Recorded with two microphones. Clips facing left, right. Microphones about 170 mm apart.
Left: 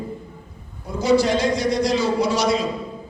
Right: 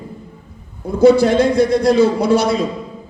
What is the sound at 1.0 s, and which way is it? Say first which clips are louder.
A man's voice: right 7 dB; 55° right (ahead or behind).